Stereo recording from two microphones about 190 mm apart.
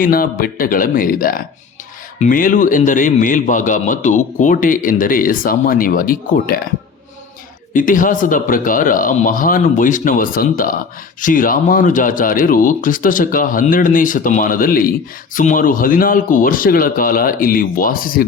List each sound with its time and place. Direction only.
0.0 s speech: 50° left (ahead or behind)
7.7 s speech: 45° left (ahead or behind)